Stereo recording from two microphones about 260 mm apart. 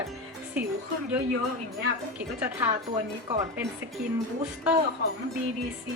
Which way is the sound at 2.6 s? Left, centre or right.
Centre.